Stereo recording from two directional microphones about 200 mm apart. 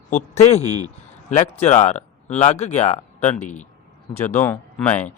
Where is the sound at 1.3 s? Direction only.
35° left (ahead or behind).